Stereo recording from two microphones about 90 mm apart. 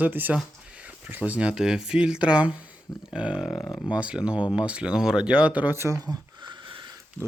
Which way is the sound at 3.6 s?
10° left (ahead or behind).